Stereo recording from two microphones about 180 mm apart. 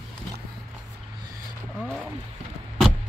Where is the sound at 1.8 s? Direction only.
Centre (ahead or behind).